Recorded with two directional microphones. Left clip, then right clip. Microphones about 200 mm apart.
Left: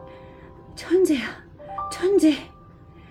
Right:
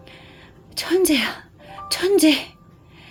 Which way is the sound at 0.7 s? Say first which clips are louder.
Right 2 dB; 50° right (ahead or behind).